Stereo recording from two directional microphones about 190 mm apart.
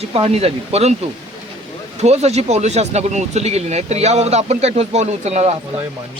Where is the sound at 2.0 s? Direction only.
35° right (ahead or behind).